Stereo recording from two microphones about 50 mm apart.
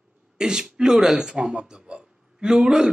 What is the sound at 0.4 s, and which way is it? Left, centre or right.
Speech, centre.